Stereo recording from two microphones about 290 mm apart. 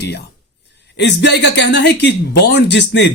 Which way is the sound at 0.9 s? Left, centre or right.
Left.